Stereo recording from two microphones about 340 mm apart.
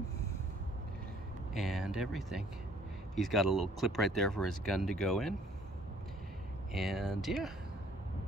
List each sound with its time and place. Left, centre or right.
1.5 s speech: centre
6.7 s speech: centre